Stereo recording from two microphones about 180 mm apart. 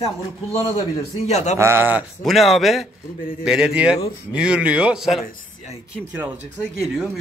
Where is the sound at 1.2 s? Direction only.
40° left (ahead or behind).